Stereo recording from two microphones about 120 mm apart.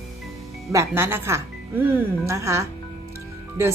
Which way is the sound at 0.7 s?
25° right (ahead or behind).